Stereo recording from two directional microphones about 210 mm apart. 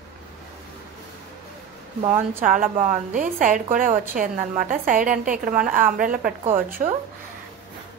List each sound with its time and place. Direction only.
2.0 s a woman's voice: 35° right (ahead or behind)